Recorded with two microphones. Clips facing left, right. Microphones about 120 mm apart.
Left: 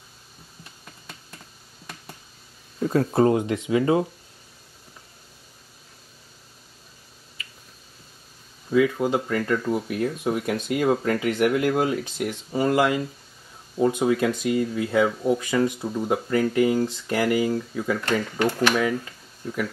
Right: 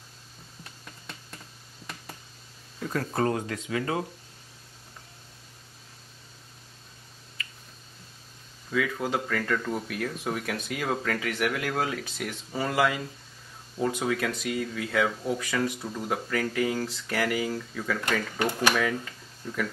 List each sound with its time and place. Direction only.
2.9 s speech: 25° left (ahead or behind)
8.6 s speech: 20° left (ahead or behind)
15.0 s speech: 10° left (ahead or behind)
18.4 s speech: 15° right (ahead or behind)
18.8 s speech: 10° left (ahead or behind)